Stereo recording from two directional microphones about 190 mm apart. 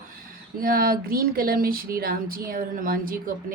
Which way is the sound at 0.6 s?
50° right (ahead or behind).